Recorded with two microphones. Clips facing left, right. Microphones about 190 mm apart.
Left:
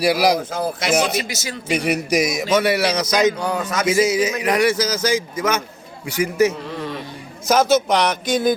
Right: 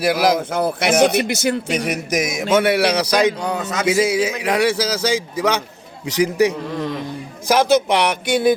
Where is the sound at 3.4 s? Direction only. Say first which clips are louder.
Even; 20° right (ahead or behind).